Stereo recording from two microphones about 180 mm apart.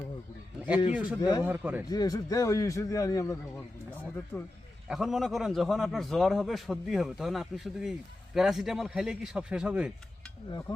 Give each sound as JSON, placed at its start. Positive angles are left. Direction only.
{"t": 0.9, "sound": "a man's voice", "side_deg": -5}
{"t": 1.2, "sound": "speech", "side_deg": 20}
{"t": 1.5, "sound": "a man's voice", "side_deg": -10}
{"t": 1.9, "sound": "a man's voice", "side_deg": 20}
{"t": 4.9, "sound": "a man's voice", "side_deg": 0}